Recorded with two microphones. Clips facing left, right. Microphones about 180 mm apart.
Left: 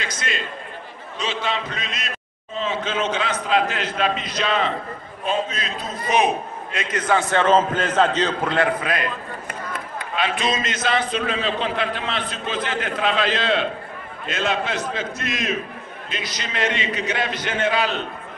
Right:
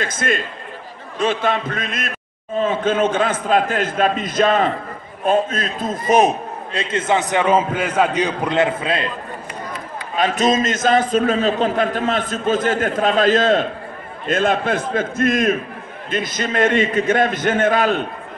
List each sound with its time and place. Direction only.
0.0 s a man's voice: 50° right (ahead or behind)
6.8 s a man's voice: 25° right (ahead or behind)
10.1 s a man's voice: 45° right (ahead or behind)